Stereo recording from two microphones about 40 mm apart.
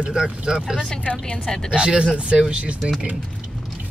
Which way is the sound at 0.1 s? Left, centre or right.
Centre.